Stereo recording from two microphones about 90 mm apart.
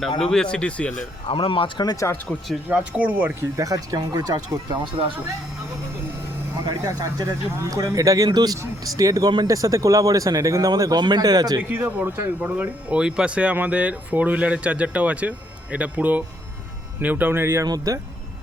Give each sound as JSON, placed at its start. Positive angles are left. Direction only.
{"t": 0.2, "sound": "speech", "side_deg": 10}
{"t": 1.3, "sound": "speech", "side_deg": 85}
{"t": 1.8, "sound": "speech", "side_deg": 45}
{"t": 2.6, "sound": "speech", "side_deg": -15}
{"t": 3.6, "sound": "speech", "side_deg": -40}
{"t": 4.8, "sound": "speech", "side_deg": -70}
{"t": 6.8, "sound": "speech", "side_deg": -40}
{"t": 11.9, "sound": "speech", "side_deg": -20}
{"t": 17.7, "sound": "speech", "side_deg": -40}